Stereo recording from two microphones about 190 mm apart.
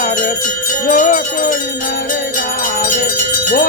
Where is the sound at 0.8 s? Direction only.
45° left (ahead or behind).